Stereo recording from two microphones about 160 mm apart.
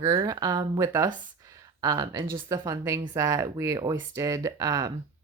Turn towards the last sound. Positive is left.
turn(degrees=-20)  # may be behind; listen again after turning